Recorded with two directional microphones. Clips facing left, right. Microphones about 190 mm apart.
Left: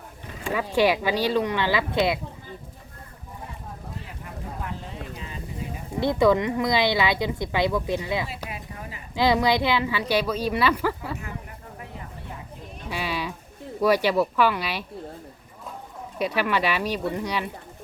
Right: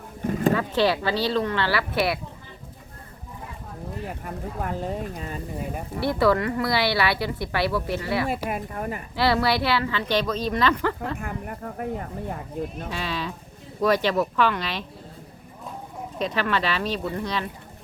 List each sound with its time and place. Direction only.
0.2 s a sound: 45° right (ahead or behind)
0.5 s speech: 10° left (ahead or behind)
4.0 s a sound: 50° right (ahead or behind)
6.0 s speech: 20° left (ahead or behind)
8.4 s speech: 50° right (ahead or behind)
9.1 s speech: 15° left (ahead or behind)
11.2 s speech: 55° right (ahead or behind)
12.9 s speech: 10° left (ahead or behind)
16.1 s speech: 10° left (ahead or behind)